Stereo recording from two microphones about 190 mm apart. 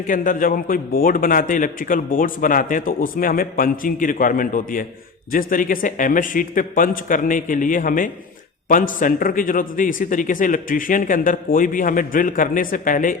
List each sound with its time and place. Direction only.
0.1 s a man's voice: 45° left (ahead or behind)